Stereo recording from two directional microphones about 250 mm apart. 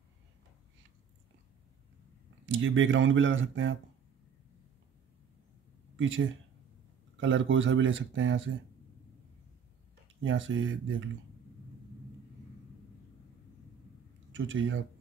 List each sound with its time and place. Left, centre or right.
2.4 s speech: right
7.2 s speech: right
10.2 s speech: right
14.3 s speech: right